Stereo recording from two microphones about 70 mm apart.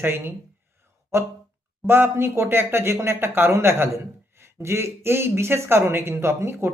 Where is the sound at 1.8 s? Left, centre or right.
Right.